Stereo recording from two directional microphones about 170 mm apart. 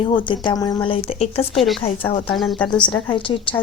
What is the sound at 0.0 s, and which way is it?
Speech, 30° left (ahead or behind).